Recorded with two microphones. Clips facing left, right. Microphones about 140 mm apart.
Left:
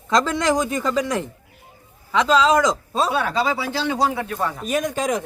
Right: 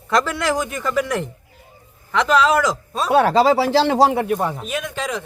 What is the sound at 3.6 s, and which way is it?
Speech, 80° right.